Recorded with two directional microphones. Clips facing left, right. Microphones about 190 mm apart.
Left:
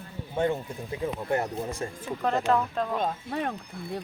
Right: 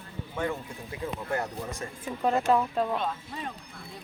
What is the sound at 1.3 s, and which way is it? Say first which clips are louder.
Speech: left 4 dB; 30° left (ahead or behind).